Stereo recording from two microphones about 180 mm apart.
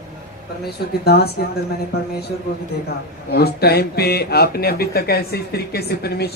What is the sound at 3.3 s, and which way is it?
Speech, 60° left (ahead or behind).